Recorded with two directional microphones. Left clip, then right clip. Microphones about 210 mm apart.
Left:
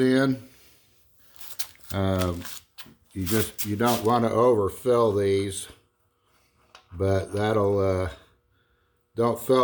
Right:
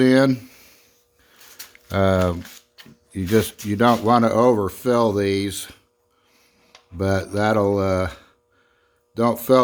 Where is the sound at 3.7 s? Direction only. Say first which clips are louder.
Right 6 dB; 45° right (ahead or behind).